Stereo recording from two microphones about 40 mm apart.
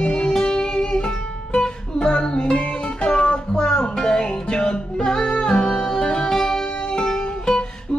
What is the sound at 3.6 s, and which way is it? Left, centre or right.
Music, centre.